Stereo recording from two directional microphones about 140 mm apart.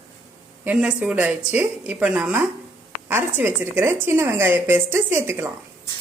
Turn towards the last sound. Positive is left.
turn(degrees=-20)  # may be behind; listen again after turning